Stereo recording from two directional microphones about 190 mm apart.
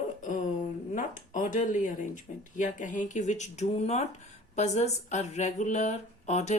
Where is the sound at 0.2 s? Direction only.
40° left (ahead or behind).